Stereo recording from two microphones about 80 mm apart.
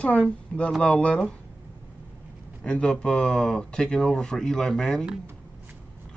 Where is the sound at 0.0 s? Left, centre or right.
Centre.